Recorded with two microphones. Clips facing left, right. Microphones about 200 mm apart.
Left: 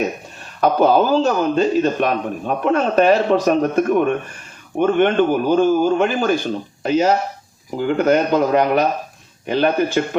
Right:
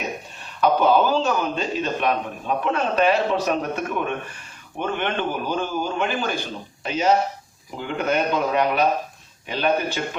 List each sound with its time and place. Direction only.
0.6 s a man's voice: 45° left (ahead or behind)